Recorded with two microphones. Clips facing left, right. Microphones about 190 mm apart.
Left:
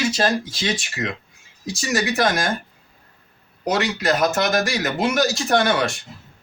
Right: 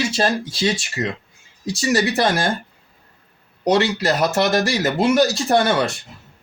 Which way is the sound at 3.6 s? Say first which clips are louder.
Right 3 dB; 30° right (ahead or behind).